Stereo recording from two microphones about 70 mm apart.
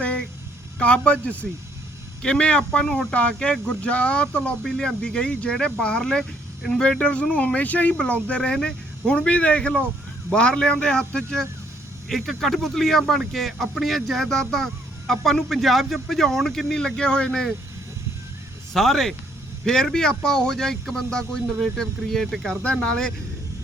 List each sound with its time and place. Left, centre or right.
0.0 s a sound: centre
0.8 s speech: centre
2.8 s speech: centre
3.1 s speech: centre
18.7 s speech: centre